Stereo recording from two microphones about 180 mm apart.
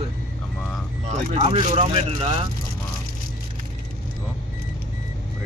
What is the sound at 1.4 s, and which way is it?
Speech, 30° right (ahead or behind).